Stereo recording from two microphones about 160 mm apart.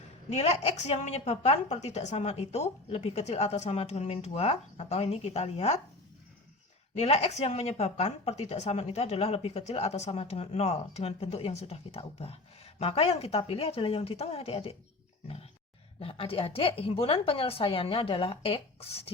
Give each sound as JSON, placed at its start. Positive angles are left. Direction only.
{"t": 0.3, "sound": "a woman's voice", "side_deg": 40}
{"t": 6.9, "sound": "a woman's voice", "side_deg": 40}
{"t": 16.0, "sound": "a woman's voice", "side_deg": 35}